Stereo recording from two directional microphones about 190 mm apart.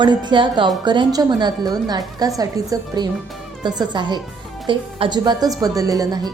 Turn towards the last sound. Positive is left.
turn(degrees=-20)  # may be behind; listen again after turning